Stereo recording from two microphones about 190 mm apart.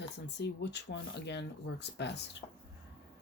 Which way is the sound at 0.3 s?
65° left (ahead or behind).